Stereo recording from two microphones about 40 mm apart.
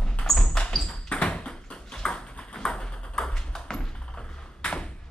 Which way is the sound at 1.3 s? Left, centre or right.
Centre.